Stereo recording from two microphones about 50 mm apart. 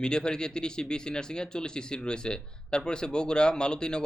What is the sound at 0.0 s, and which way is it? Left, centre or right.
Speech, centre.